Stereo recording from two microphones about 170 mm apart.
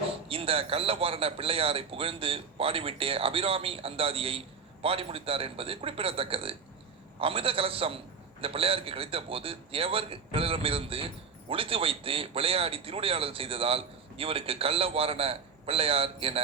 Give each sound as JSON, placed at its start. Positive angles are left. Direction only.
{"t": 0.1, "sound": "a man's voice", "side_deg": -35}